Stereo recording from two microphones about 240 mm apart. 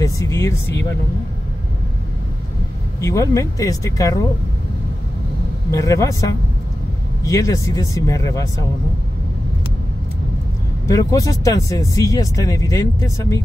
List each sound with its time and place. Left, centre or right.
0.0 s speech: centre
3.0 s speech: centre
5.7 s speech: centre
10.9 s speech: centre